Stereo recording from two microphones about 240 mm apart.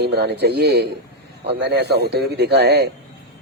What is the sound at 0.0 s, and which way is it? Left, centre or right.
A man's voice, right.